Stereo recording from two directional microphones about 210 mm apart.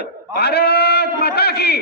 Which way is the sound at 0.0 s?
50° left (ahead or behind).